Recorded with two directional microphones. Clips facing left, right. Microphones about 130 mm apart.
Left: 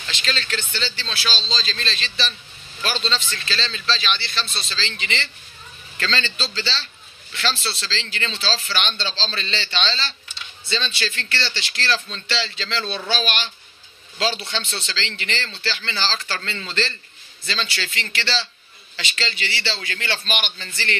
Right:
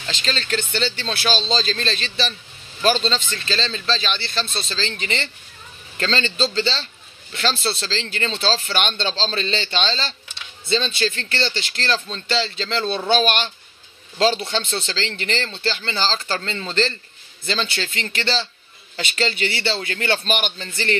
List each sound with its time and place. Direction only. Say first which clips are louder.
0.1 s a man's voice: right 3 dB; 35° right (ahead or behind)
0.9 s a man's voice: right 6 dB; 50° right (ahead or behind); by 13.1 s 30° right (ahead or behind)
13.1 s a man's voice: right 8 dB; 45° right (ahead or behind)